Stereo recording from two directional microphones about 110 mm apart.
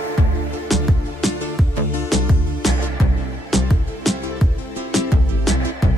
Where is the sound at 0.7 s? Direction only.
Centre (ahead or behind).